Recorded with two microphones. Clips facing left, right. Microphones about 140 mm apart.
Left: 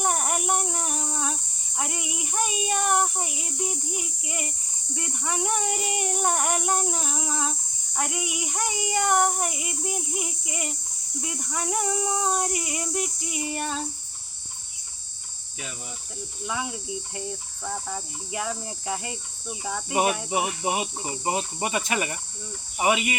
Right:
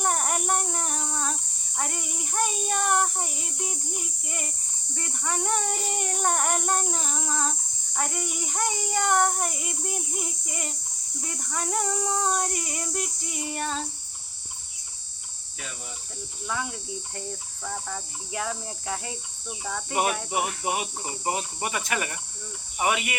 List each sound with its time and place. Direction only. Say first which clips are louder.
0.0 s cricket: left 1 dB; 5° left (ahead or behind)
4.9 s child singing: left 1 dB; 10° left (ahead or behind)
11.2 s a sound: left 2 dB; 5° left (ahead or behind)
16.5 s child singing: left 1 dB; 5° left (ahead or behind)
19.5 s a sound: left 2 dB; 10° left (ahead or behind)
20.7 s cricket: left 2 dB; 20° left (ahead or behind)